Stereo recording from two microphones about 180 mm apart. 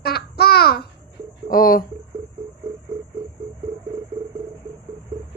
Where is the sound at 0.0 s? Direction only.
60° left (ahead or behind).